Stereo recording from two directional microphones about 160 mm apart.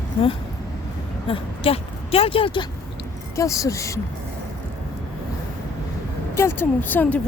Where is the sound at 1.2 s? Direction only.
35° left (ahead or behind).